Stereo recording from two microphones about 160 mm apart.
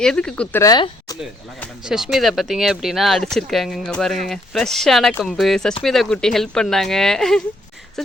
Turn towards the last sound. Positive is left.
turn(degrees=5)  # may be behind; listen again after turning